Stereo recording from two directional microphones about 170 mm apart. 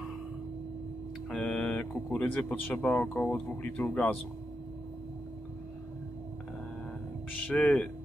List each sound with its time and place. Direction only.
1.3 s speech: 5° left (ahead or behind)
7.4 s speech: 10° left (ahead or behind)